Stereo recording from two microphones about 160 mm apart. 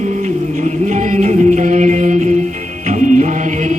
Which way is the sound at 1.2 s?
50° right (ahead or behind).